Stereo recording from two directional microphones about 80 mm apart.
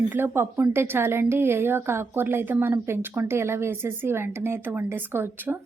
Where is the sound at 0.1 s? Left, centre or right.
Right.